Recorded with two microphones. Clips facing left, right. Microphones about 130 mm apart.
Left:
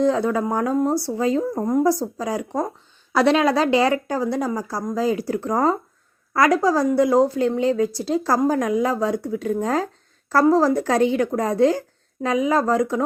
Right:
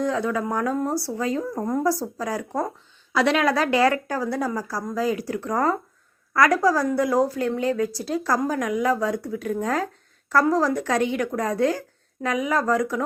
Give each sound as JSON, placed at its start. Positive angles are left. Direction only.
{"t": 0.0, "sound": "a woman's voice", "side_deg": 30}
{"t": 3.1, "sound": "a woman's voice", "side_deg": 40}
{"t": 3.3, "sound": "a woman's voice", "side_deg": 25}